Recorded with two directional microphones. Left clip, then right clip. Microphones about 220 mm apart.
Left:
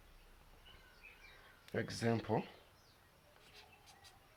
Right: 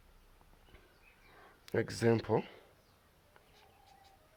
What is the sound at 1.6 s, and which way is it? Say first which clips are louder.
Speech: right 7 dB; 45° right (ahead or behind).